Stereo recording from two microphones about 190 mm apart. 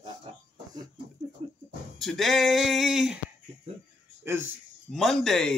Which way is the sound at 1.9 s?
Centre (ahead or behind).